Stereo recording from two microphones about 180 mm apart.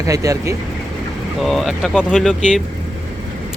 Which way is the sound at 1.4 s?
Centre (ahead or behind).